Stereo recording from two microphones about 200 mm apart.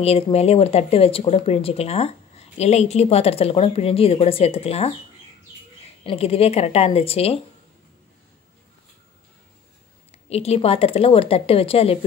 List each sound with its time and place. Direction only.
0.0 s speech: 30° left (ahead or behind)
6.0 s a woman's voice: 30° left (ahead or behind)
10.3 s a woman's voice: 30° left (ahead or behind)